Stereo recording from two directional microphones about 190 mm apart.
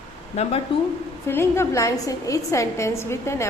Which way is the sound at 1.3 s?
15° left (ahead or behind).